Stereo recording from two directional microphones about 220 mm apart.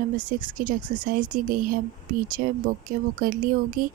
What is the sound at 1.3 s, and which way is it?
Speech, 40° right (ahead or behind).